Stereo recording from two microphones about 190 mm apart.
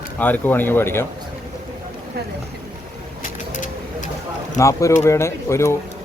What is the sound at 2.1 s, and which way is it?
Speech, 55° right (ahead or behind).